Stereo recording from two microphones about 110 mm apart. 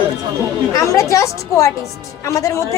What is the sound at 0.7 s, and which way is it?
A woman's voice, 30° left (ahead or behind).